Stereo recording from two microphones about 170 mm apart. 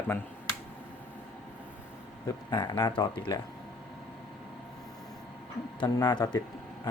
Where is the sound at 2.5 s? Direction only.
25° left (ahead or behind).